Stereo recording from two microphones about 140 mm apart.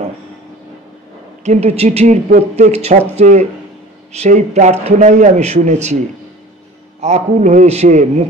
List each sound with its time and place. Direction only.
1.4 s a man's voice: 50° right (ahead or behind)
7.0 s a man's voice: 55° right (ahead or behind)